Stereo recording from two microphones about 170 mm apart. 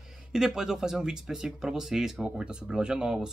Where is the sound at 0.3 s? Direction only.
5° right (ahead or behind).